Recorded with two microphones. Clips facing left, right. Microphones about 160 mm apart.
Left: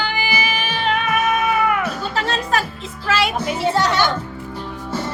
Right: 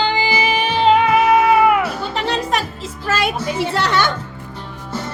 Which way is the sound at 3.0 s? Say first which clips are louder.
Even; 50° right (ahead or behind).